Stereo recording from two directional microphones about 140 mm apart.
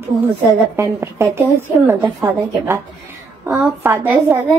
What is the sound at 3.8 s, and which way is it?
Speech, 20° right (ahead or behind).